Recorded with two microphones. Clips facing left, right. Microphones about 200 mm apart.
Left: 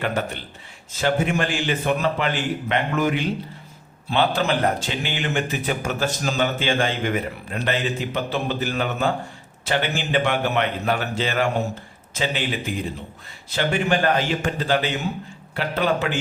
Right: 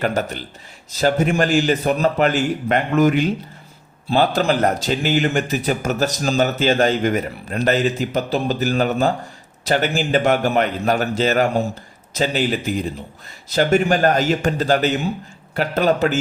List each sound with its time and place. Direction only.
0.0 s a man's voice: 40° right (ahead or behind)